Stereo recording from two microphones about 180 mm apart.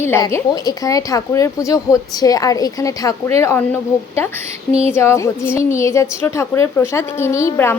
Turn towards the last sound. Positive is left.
turn(degrees=15)  # may be behind; listen again after turning